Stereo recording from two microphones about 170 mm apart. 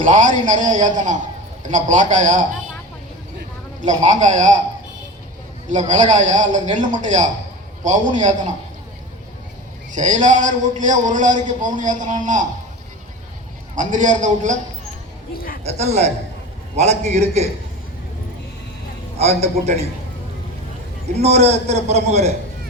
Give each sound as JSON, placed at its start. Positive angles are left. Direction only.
{"t": 0.0, "sound": "a man's voice", "side_deg": -50}
{"t": 3.8, "sound": "a man's voice", "side_deg": -45}
{"t": 5.6, "sound": "a man's voice", "side_deg": -45}
{"t": 9.9, "sound": "a man's voice", "side_deg": -50}
{"t": 13.7, "sound": "a man's voice", "side_deg": -50}
{"t": 15.6, "sound": "a man's voice", "side_deg": -40}
{"t": 19.2, "sound": "a man's voice", "side_deg": -40}
{"t": 21.2, "sound": "a man's voice", "side_deg": -40}